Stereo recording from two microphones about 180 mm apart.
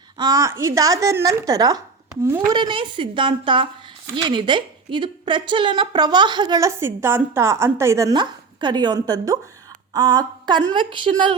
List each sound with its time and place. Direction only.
0.2 s a woman's voice: 20° right (ahead or behind)
2.6 s a woman's voice: 25° right (ahead or behind)
9.9 s a sound: 20° right (ahead or behind)
10.7 s a woman's voice: 25° right (ahead or behind)